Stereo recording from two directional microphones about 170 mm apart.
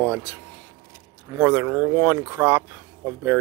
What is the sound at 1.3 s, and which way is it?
Speech, 15° right (ahead or behind).